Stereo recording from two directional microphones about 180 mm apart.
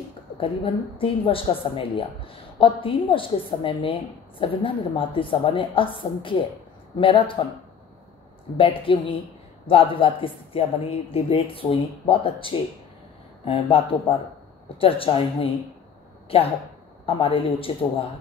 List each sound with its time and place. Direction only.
0.9 s a woman's voice: 30° left (ahead or behind)
8.5 s a woman's voice: 30° left (ahead or behind)